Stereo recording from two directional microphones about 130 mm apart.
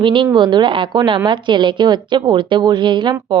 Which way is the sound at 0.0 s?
40° right (ahead or behind).